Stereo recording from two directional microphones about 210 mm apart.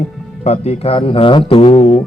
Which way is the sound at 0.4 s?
30° left (ahead or behind).